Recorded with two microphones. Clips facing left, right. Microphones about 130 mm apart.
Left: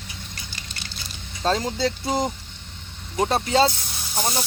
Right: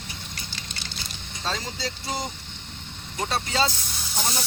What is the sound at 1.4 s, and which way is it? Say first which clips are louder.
Speech: left 9 dB; 50° left (ahead or behind).